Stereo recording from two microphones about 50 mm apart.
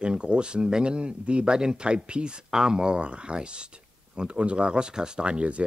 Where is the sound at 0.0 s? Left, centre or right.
Centre.